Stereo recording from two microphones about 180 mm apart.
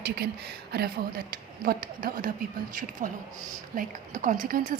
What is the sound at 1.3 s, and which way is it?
Speech, 55° right (ahead or behind).